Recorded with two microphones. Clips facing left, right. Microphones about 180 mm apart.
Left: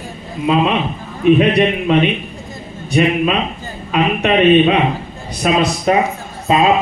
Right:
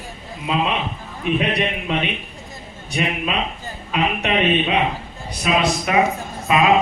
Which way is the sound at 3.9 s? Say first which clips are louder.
Left 6 dB; 50° left (ahead or behind).